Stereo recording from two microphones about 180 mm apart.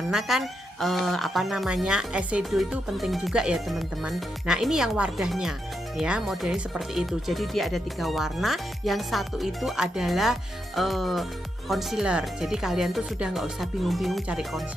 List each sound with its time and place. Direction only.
0.1 s speech: centre (ahead or behind)